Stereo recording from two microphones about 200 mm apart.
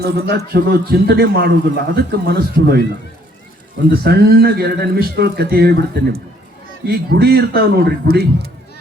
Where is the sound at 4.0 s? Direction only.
55° right (ahead or behind).